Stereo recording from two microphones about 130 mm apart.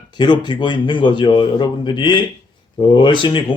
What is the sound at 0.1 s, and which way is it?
A man's voice, 35° left (ahead or behind).